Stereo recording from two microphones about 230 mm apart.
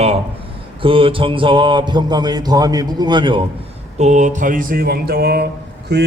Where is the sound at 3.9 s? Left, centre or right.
Right.